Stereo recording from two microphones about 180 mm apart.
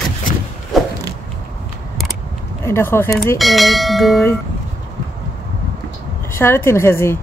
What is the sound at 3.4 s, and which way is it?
Speech, centre (ahead or behind).